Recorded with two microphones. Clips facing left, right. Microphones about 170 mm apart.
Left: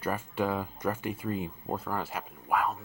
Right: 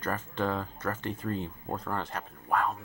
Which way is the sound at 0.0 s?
10° left (ahead or behind).